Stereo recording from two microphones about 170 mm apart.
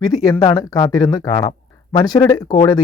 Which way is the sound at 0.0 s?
20° left (ahead or behind).